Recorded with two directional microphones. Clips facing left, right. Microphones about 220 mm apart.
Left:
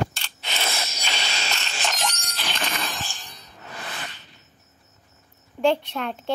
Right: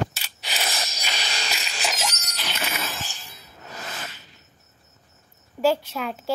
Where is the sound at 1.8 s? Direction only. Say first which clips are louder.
Even; 5° right (ahead or behind).